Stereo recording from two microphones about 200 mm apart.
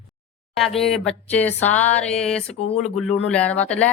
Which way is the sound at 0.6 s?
Centre (ahead or behind).